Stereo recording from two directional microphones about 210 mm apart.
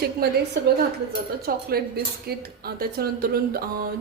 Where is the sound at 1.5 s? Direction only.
45° right (ahead or behind).